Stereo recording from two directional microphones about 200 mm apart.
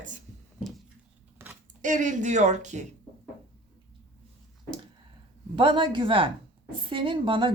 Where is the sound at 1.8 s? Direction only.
40° right (ahead or behind).